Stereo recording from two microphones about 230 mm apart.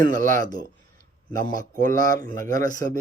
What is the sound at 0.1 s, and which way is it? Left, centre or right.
Speech, right.